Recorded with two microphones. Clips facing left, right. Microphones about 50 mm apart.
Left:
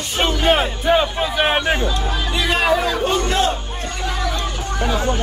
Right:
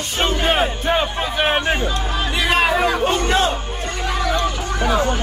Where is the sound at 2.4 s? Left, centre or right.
Centre.